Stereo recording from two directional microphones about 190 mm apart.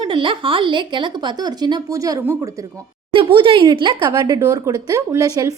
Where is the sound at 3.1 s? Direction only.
25° right (ahead or behind).